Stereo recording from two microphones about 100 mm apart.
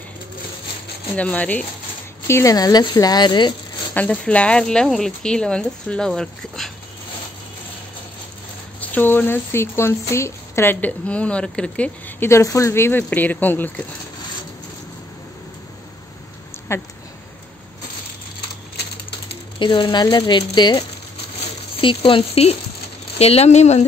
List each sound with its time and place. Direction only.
1.1 s speech: 15° left (ahead or behind)
2.2 s speech: 25° left (ahead or behind)
2.5 s speech: 40° left (ahead or behind)
3.9 s speech: 15° left (ahead or behind)
8.8 s speech: 20° left (ahead or behind)
12.3 s speech: 30° left (ahead or behind)
16.5 s a sound: 25° left (ahead or behind)
19.6 s speech: 55° left (ahead or behind)
21.8 s speech: 65° left (ahead or behind); by 23.9 s 90° left